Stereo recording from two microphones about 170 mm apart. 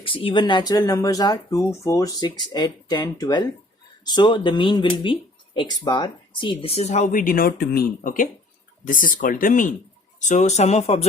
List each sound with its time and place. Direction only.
0.0 s speech: 30° left (ahead or behind)